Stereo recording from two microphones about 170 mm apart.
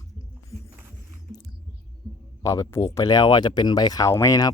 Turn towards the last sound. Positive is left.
turn(degrees=20)  # may be behind; listen again after turning